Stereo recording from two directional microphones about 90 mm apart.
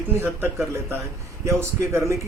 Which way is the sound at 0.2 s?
25° right (ahead or behind).